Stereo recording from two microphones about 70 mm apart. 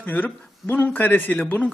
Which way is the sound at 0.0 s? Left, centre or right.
Left.